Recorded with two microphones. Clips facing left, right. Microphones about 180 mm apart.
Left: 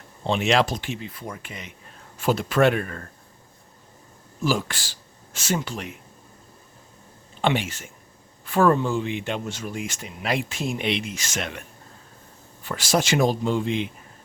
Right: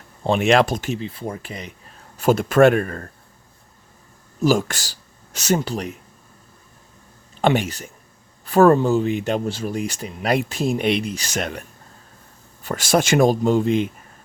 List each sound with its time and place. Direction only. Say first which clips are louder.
0.3 s speech: right 5 dB; 50° right (ahead or behind)
0.9 s speech: right 6 dB; 30° right (ahead or behind)
2.1 s speech: right 6 dB; 45° right (ahead or behind)
4.4 s speech: right 6 dB; 45° right (ahead or behind)
7.4 s speech: right 5 dB; 45° right (ahead or behind)
12.6 s speech: right 4 dB; 50° right (ahead or behind)